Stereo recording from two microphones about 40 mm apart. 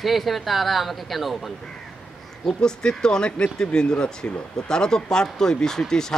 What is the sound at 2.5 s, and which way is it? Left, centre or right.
Speech, centre.